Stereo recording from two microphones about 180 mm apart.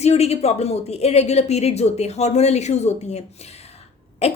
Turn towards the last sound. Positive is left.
turn(degrees=35)  # may be behind; listen again after turning